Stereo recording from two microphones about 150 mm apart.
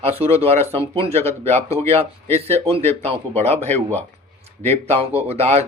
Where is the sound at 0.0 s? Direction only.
40° right (ahead or behind).